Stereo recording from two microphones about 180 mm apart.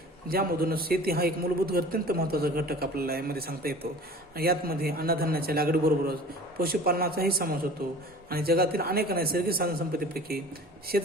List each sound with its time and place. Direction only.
0.3 s a man's voice: 55° right (ahead or behind)